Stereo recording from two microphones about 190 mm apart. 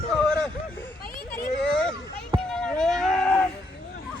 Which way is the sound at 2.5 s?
5° left (ahead or behind).